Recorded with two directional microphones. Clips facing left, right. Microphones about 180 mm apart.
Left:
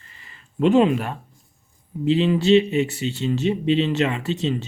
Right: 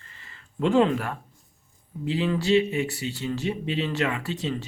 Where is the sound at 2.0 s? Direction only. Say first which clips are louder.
Left 7 dB; 20° left (ahead or behind).